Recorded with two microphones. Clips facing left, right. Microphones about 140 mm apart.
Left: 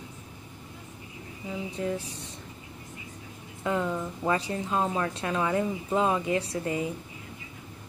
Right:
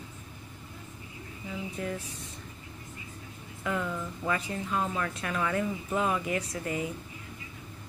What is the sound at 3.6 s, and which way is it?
Speech, 25° left (ahead or behind).